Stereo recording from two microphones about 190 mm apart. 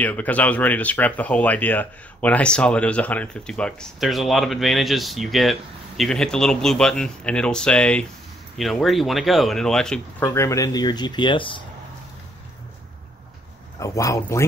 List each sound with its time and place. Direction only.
0.0 s speech: 10° left (ahead or behind)
10.3 s speech: 15° left (ahead or behind)
13.7 s speech: 15° left (ahead or behind)